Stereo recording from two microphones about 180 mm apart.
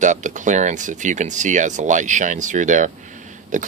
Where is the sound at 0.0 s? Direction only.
45° right (ahead or behind).